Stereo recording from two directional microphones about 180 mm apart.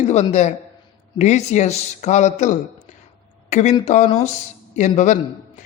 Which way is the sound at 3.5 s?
40° left (ahead or behind).